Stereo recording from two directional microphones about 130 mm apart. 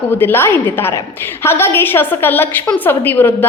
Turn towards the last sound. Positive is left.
turn(degrees=15)  # may be behind; listen again after turning